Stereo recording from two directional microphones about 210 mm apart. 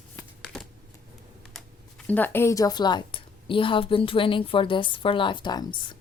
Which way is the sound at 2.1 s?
10° left (ahead or behind).